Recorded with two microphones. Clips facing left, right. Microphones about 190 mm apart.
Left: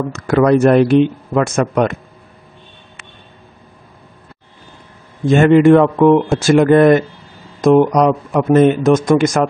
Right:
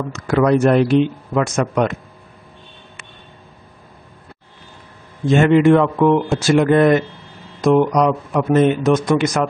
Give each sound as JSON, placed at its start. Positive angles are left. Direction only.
{"t": 0.1, "sound": "speech", "side_deg": 50}
{"t": 5.3, "sound": "speech", "side_deg": 50}